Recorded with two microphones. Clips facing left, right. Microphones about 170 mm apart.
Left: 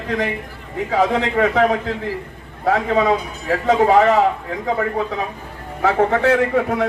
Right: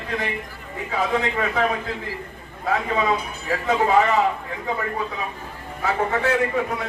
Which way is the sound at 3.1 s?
75° left (ahead or behind).